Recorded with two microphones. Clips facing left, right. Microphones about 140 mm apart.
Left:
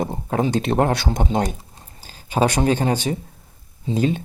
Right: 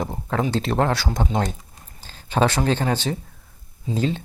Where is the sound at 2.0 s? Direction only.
10° left (ahead or behind).